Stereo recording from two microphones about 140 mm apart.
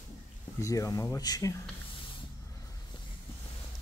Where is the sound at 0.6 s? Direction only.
20° left (ahead or behind).